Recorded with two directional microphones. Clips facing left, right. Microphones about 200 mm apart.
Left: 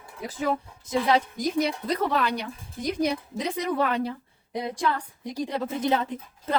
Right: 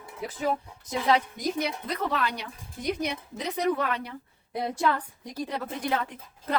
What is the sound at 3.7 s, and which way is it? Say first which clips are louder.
Speech: left 5 dB; 30° left (ahead or behind).